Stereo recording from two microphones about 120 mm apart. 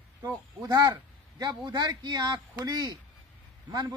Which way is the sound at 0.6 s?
35° right (ahead or behind).